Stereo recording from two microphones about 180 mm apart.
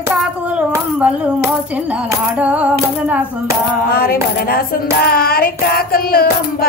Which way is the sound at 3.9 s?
55° left (ahead or behind).